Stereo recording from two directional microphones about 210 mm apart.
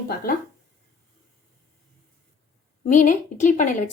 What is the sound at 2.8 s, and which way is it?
A woman's voice, 35° left (ahead or behind).